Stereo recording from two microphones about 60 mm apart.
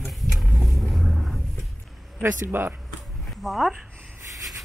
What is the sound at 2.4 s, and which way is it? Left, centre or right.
Speech, right.